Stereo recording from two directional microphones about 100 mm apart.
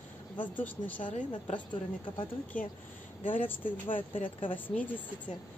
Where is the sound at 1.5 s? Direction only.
60° left (ahead or behind).